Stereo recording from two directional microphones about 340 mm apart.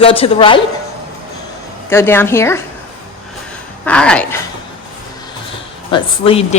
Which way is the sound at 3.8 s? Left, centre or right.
Centre.